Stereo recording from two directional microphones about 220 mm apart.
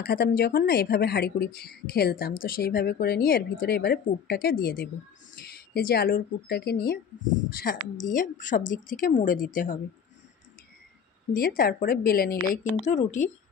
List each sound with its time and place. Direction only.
0.0 s a woman's voice: 45° left (ahead or behind)
11.3 s speech: 40° left (ahead or behind)
12.8 s a woman's voice: 30° left (ahead or behind)